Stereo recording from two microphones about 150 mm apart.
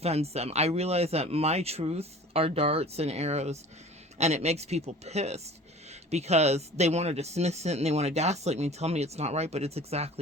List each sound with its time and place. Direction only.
0.0 s speech: 45° right (ahead or behind)